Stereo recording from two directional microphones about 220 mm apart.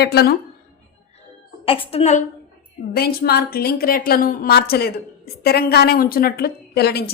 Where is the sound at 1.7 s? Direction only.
25° left (ahead or behind).